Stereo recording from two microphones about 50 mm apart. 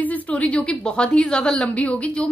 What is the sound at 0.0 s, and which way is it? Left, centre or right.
A woman's voice, left.